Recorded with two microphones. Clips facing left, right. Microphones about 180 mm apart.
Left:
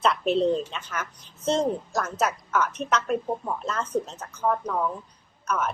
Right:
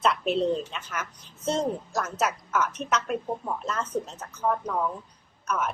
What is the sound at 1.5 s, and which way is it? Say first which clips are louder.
A woman's voice: left 3 dB; 5° right (ahead or behind).